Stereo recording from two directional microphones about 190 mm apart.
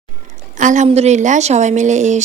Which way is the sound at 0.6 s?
40° right (ahead or behind).